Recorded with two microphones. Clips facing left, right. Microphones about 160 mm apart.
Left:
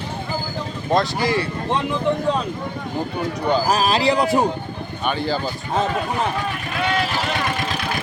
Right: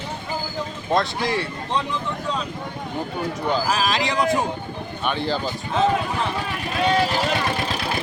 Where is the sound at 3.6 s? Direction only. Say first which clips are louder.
Left 4 dB; 35° left (ahead or behind).